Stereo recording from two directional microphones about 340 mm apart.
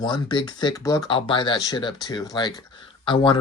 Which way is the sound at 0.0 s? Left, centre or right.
Centre.